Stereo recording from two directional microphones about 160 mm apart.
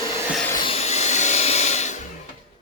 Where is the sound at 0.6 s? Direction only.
40° left (ahead or behind).